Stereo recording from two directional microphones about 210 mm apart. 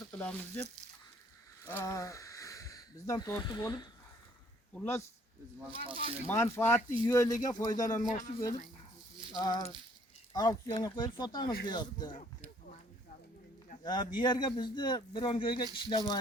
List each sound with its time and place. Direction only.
0.2 s speech: 10° left (ahead or behind)
1.6 s speech: 15° left (ahead or behind)
5.8 s speech: 25° right (ahead or behind)
6.2 s speech: 10° left (ahead or behind)
9.3 s a man's voice: 20° left (ahead or behind)
13.8 s a man's voice: 20° left (ahead or behind)